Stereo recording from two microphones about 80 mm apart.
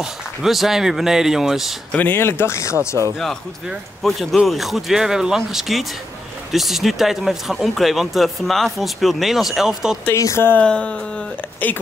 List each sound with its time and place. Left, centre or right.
0.0 s speech: centre
1.9 s speech: left
3.2 s speech: centre
10.1 s speech: left
10.6 s speech: centre